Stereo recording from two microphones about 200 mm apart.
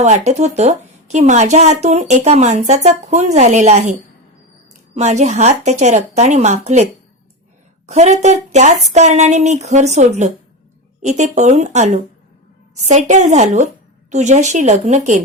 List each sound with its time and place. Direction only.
0.0 s a woman's voice: 35° right (ahead or behind)
4.9 s a woman's voice: 35° right (ahead or behind)
7.9 s a woman's voice: 35° right (ahead or behind)